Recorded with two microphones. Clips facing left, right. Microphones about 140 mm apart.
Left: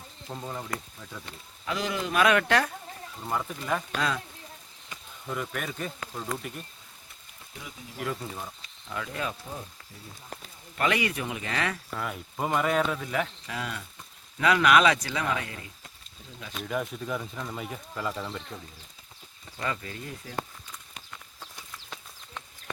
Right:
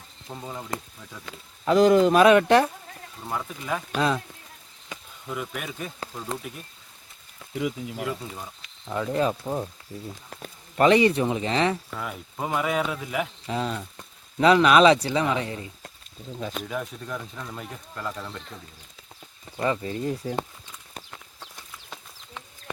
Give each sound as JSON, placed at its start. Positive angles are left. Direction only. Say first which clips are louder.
{"t": 0.3, "sound": "speech", "louder": "even", "side_deg": -5}
{"t": 1.6, "sound": "speech", "louder": "right 14 dB", "side_deg": -45}
{"t": 2.1, "sound": "speech", "louder": "right 7 dB", "side_deg": -25}
{"t": 3.2, "sound": "speech", "louder": "even", "side_deg": 0}
{"t": 3.9, "sound": "speech", "louder": "right 9 dB", "side_deg": -20}
{"t": 5.3, "sound": "speech", "louder": "right 1 dB", "side_deg": -5}
{"t": 8.0, "sound": "speech", "louder": "left 2 dB", "side_deg": 0}
{"t": 8.9, "sound": "speech", "louder": "right 9 dB", "side_deg": -30}
{"t": 10.8, "sound": "speech", "louder": "right 9 dB", "side_deg": -30}
{"t": 11.9, "sound": "speech", "louder": "even", "side_deg": 0}
{"t": 13.5, "sound": "speech", "louder": "right 7 dB", "side_deg": -30}
{"t": 16.6, "sound": "speech", "louder": "left 1 dB", "side_deg": 0}
{"t": 19.6, "sound": "speech", "louder": "right 8 dB", "side_deg": -25}